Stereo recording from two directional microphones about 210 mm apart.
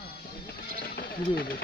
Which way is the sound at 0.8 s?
45° left (ahead or behind).